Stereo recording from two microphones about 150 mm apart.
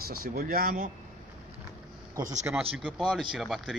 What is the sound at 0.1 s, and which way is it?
Speech, 80° right.